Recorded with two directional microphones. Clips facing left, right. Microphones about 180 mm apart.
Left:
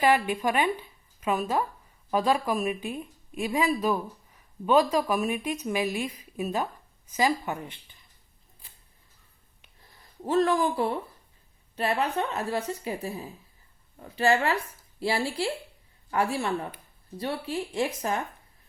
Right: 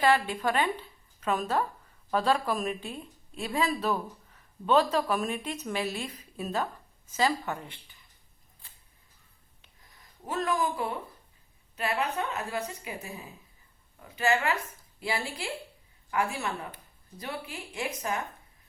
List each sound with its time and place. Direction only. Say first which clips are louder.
0.0 s a woman's voice: left 2 dB; 15° left (ahead or behind)
10.2 s speech: left 6 dB; 30° left (ahead or behind)
14.2 s speech: left 3 dB; 35° left (ahead or behind)